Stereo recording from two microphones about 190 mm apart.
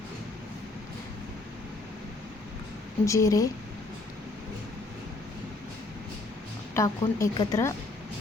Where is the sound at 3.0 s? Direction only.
15° left (ahead or behind).